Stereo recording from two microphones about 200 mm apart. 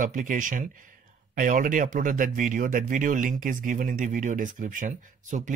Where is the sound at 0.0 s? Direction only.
40° right (ahead or behind).